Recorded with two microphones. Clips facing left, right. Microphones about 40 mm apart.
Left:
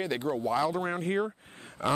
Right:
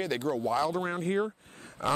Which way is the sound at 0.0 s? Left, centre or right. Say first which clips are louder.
Even; centre.